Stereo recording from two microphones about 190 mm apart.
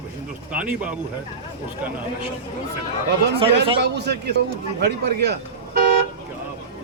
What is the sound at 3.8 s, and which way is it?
A man's voice, 60° right (ahead or behind).